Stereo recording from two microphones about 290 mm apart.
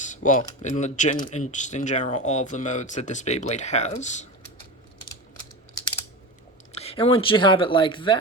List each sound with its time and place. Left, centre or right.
0.0 s a sound: left
0.6 s speech: left
6.7 s speech: centre